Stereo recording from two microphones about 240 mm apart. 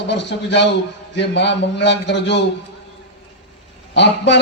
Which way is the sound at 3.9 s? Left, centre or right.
Left.